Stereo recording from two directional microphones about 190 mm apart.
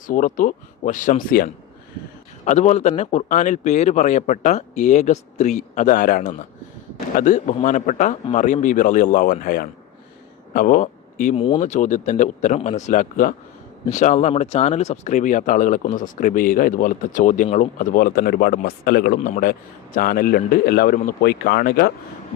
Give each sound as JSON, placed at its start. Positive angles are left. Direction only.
{"t": 0.1, "sound": "speech", "side_deg": 45}
{"t": 11.3, "sound": "speech", "side_deg": 25}
{"t": 11.6, "sound": "speech", "side_deg": 40}